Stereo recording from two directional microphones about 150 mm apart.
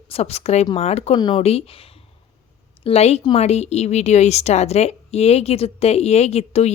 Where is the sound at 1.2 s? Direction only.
30° left (ahead or behind).